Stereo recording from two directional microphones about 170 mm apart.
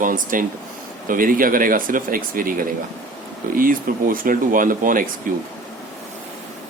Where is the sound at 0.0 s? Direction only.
50° right (ahead or behind).